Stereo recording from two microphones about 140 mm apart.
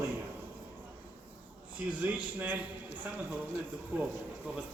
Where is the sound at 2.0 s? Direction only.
10° right (ahead or behind).